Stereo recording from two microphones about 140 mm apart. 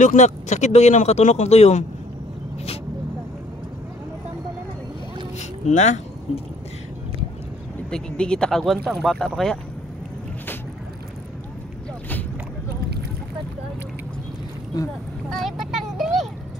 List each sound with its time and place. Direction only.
0.0 s speech: 60° left (ahead or behind)
5.7 s speech: 55° left (ahead or behind)
7.9 s speech: 5° left (ahead or behind)
15.2 s vehicle: centre (ahead or behind)